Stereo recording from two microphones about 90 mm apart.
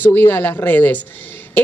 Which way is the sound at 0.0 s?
25° left (ahead or behind).